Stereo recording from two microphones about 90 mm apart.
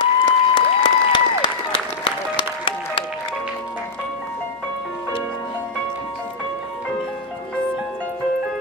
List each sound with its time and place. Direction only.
0.0 s applause: 55° left (ahead or behind); by 3.1 s 75° left (ahead or behind)